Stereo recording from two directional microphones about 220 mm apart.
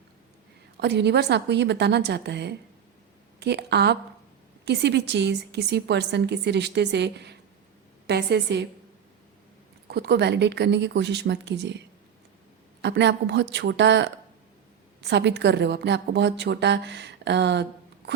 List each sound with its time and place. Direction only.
0.8 s a woman's voice: 50° right (ahead or behind)
9.9 s a woman's voice: 50° right (ahead or behind)